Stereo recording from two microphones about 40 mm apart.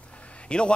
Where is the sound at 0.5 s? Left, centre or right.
Left.